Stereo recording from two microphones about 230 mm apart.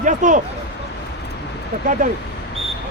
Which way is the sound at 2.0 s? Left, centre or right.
Right.